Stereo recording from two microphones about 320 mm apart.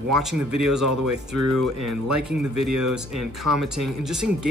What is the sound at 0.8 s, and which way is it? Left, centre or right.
Speech, right.